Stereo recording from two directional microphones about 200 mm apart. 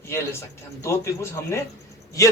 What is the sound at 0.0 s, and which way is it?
Speech, 10° left (ahead or behind).